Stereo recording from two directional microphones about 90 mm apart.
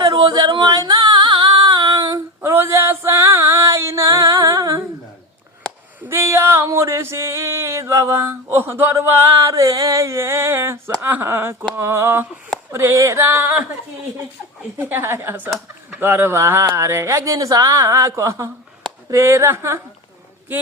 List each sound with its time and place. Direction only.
0.0 s yodeling: 50° right (ahead or behind)
1.6 s female singing: 55° right (ahead or behind)
2.5 s music: 30° right (ahead or behind)
6.1 s a sound: 30° right (ahead or behind)
11.0 s speech: 25° right (ahead or behind)
14.8 s speech: 20° right (ahead or behind)